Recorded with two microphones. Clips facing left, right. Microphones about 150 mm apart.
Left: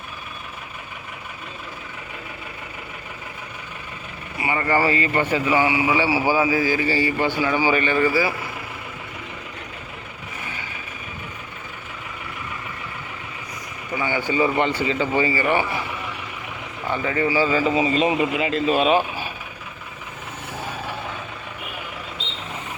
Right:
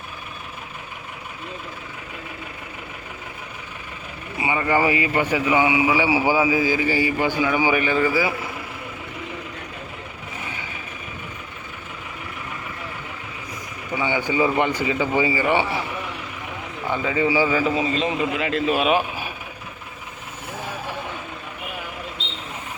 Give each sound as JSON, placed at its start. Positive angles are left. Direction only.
{"t": 4.4, "sound": "a man's voice", "side_deg": -15}
{"t": 14.0, "sound": "a man's voice", "side_deg": -15}
{"t": 16.9, "sound": "a man's voice", "side_deg": -15}
{"t": 17.6, "sound": "speech", "side_deg": 0}